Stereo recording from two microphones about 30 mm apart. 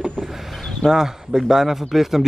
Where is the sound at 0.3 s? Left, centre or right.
Centre.